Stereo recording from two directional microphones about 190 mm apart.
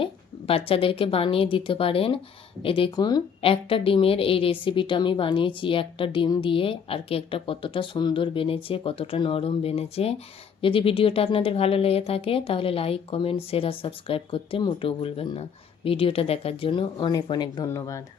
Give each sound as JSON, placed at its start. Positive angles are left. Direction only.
{"t": 0.0, "sound": "a woman's voice", "side_deg": 30}